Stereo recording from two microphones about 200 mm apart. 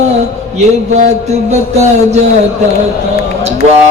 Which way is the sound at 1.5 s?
35° right (ahead or behind).